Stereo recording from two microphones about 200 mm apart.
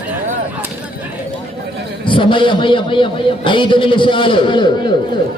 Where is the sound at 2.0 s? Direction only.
25° left (ahead or behind).